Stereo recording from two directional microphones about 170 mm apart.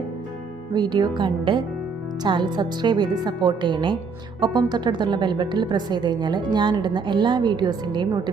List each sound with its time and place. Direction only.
0.7 s a woman's voice: 25° right (ahead or behind)